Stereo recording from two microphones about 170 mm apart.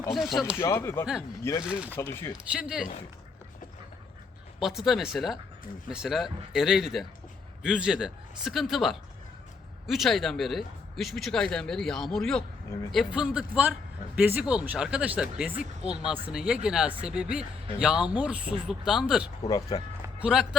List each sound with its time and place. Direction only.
0.1 s a man's voice: centre (ahead or behind)
0.6 s speech: 15° left (ahead or behind)
1.6 s speech: 5° right (ahead or behind)
2.0 s speech: 15° left (ahead or behind)
2.5 s a man's voice: 5° right (ahead or behind)
4.6 s a man's voice: centre (ahead or behind)
19.5 s speech: 20° left (ahead or behind)
20.2 s a man's voice: 5° right (ahead or behind)